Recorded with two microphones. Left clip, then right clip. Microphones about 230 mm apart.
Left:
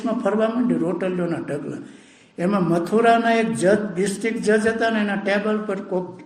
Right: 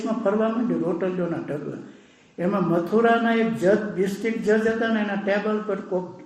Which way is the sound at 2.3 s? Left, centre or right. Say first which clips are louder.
Left 2 dB; left.